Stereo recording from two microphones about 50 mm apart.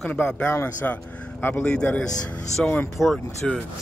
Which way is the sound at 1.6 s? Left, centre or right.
Centre.